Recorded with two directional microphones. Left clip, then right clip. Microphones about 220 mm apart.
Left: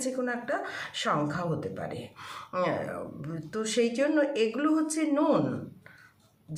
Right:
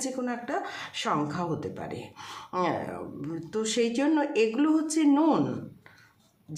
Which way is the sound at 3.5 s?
40° right (ahead or behind).